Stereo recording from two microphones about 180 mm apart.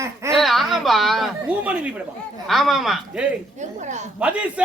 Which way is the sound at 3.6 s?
40° right (ahead or behind).